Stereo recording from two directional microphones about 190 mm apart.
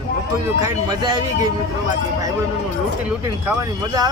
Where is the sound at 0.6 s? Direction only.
20° right (ahead or behind).